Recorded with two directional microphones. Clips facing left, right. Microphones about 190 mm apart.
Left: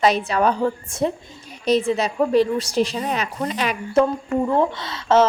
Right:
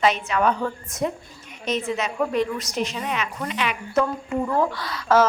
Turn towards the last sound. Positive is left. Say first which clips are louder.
# left 2 dB
turn(degrees=25)  # may be behind; listen again after turning